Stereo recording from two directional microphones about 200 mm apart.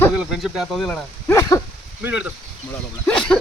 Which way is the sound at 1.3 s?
15° left (ahead or behind).